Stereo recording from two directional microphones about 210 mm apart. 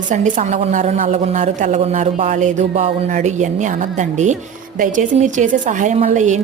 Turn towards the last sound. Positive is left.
turn(degrees=-35)  # may be behind; listen again after turning